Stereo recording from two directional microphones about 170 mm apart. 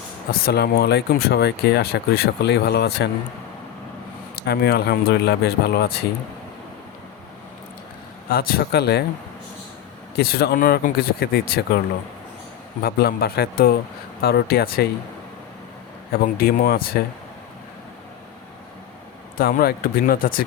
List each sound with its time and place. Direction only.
0.3 s speech: 65° left (ahead or behind)
4.4 s speech: 70° left (ahead or behind)
8.3 s speech: 60° left (ahead or behind)
10.2 s speech: 65° left (ahead or behind)
12.8 s speech: 65° left (ahead or behind)
16.2 s speech: 60° left (ahead or behind)
19.4 s speech: 60° left (ahead or behind)